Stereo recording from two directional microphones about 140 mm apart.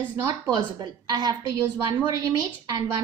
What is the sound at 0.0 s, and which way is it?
A woman's voice, 25° right (ahead or behind).